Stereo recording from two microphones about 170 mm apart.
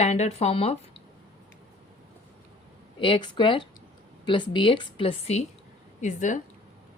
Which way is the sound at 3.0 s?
30° left (ahead or behind).